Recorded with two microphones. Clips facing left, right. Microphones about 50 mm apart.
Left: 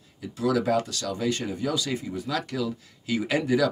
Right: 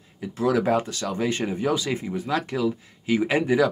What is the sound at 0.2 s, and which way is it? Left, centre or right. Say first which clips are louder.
Speech: right 3 dB; right.